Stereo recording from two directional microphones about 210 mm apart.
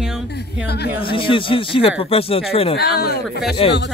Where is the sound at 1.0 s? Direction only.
25° left (ahead or behind).